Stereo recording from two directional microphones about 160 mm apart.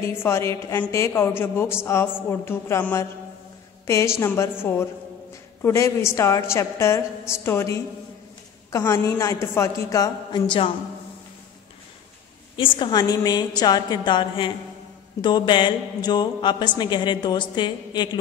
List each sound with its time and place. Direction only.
0.0 s a woman's voice: 15° left (ahead or behind)
12.5 s speech: 30° left (ahead or behind)